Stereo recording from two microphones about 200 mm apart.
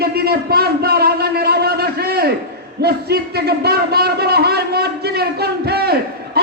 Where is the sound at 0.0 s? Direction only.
50° right (ahead or behind).